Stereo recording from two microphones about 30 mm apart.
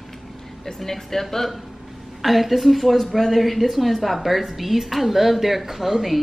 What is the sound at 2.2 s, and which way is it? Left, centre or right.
A woman's voice, centre.